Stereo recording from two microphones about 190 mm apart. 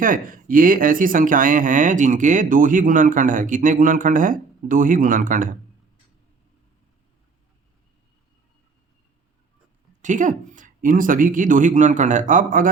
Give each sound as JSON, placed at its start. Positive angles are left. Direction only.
{"t": 0.0, "sound": "speech", "side_deg": -45}
{"t": 10.0, "sound": "speech", "side_deg": -40}